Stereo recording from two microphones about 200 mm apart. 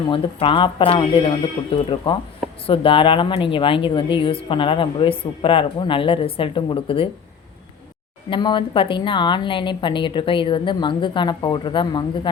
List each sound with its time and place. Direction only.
0.1 s a woman's voice: 25° left (ahead or behind)
8.3 s a woman's voice: 25° left (ahead or behind)